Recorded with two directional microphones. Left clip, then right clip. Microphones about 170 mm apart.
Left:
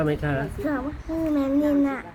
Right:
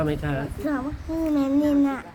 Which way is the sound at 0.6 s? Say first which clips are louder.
Even; 10° right (ahead or behind).